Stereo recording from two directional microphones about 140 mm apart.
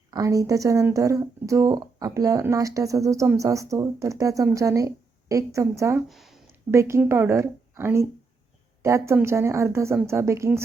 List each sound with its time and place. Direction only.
0.1 s speech: 25° right (ahead or behind)
6.1 s speech: centre (ahead or behind)
6.7 s speech: 20° right (ahead or behind)